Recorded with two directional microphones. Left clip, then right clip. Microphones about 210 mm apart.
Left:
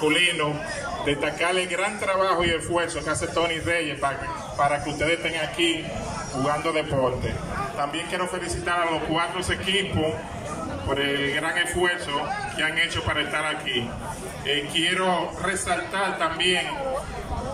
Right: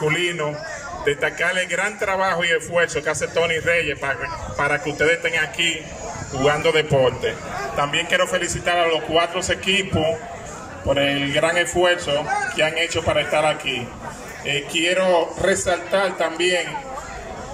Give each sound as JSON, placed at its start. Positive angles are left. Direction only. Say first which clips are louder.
{"t": 0.0, "sound": "a man's voice", "louder": "even", "side_deg": -30}
{"t": 11.0, "sound": "a man's voice", "louder": "right 5 dB", "side_deg": -55}